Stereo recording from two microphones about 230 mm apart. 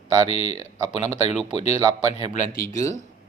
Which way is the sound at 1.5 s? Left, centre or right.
Left.